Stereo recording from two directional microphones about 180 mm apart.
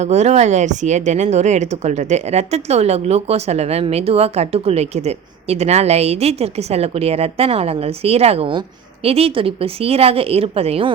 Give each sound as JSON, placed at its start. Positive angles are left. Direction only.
{"t": 0.0, "sound": "a woman's voice", "side_deg": -40}